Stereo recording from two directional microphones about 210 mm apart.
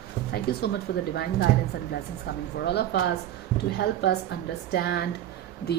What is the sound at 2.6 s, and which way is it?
Speech, 50° left (ahead or behind).